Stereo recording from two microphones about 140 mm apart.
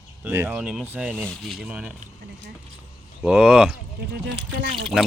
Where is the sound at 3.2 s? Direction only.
10° right (ahead or behind).